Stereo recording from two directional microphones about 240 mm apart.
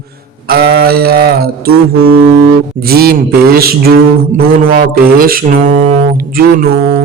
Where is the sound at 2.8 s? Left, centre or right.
Right.